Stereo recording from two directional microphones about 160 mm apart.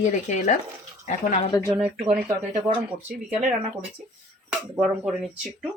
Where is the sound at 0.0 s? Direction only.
50° left (ahead or behind).